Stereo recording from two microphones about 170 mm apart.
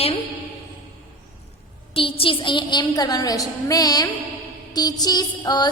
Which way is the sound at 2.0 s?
30° left (ahead or behind).